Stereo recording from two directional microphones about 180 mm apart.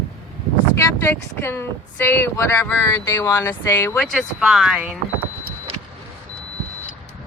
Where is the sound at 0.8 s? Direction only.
15° left (ahead or behind); by 4.9 s 5° right (ahead or behind).